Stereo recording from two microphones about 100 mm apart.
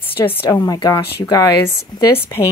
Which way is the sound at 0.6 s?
40° left (ahead or behind).